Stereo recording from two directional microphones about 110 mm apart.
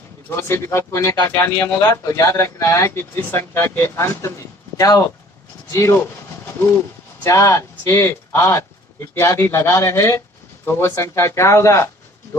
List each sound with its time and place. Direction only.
0.3 s speech: 20° left (ahead or behind)
7.3 s speech: 30° left (ahead or behind)